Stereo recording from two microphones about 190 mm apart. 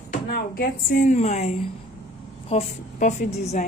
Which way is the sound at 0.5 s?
50° left (ahead or behind).